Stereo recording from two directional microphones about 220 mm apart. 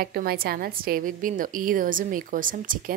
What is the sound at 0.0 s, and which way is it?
A woman's voice, 45° right (ahead or behind).